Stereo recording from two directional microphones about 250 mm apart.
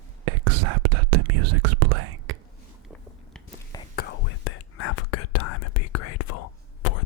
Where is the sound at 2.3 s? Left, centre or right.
Right.